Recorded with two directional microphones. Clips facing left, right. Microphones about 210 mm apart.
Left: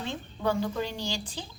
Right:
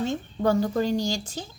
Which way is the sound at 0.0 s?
45° right (ahead or behind).